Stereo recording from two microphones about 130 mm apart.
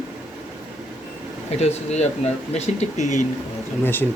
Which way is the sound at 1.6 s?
55° left (ahead or behind).